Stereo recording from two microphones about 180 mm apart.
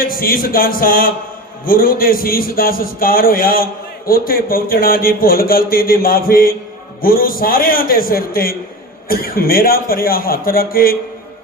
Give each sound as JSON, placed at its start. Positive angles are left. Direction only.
{"t": 0.0, "sound": "a man's voice", "side_deg": 55}